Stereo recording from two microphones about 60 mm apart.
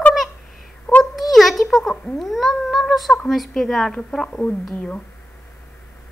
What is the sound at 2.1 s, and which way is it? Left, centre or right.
A woman's voice, centre.